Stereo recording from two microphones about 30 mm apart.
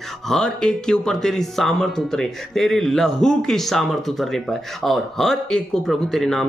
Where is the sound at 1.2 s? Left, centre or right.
Centre.